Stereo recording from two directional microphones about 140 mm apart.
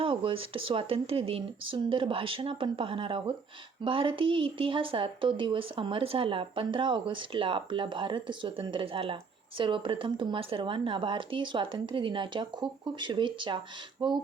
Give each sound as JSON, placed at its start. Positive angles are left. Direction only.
{"t": 0.0, "sound": "speech", "side_deg": -40}